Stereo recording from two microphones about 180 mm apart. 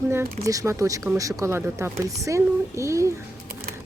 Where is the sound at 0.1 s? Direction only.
15° right (ahead or behind).